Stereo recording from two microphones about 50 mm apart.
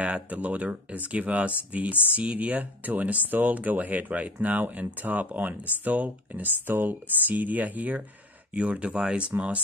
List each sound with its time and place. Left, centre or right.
0.0 s speech: right